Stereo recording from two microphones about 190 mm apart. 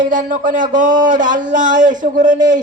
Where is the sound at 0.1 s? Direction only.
45° right (ahead or behind).